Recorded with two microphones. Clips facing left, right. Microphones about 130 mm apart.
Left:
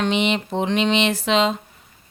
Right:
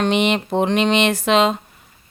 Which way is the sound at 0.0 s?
55° right (ahead or behind).